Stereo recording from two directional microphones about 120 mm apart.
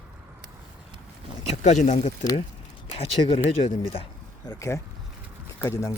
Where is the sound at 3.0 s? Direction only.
55° left (ahead or behind).